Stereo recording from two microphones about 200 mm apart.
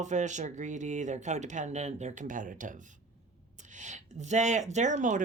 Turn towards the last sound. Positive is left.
turn(degrees=-35)  # may be behind; listen again after turning